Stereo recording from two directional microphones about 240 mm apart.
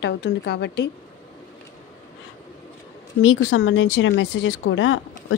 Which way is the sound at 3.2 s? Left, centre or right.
Left.